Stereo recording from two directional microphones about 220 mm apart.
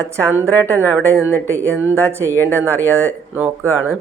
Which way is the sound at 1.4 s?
10° right (ahead or behind).